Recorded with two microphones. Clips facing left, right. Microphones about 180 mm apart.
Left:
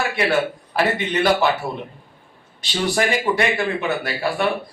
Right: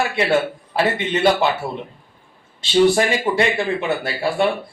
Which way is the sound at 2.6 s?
25° right (ahead or behind).